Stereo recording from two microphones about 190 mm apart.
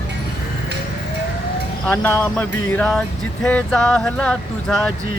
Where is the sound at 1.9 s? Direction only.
10° left (ahead or behind).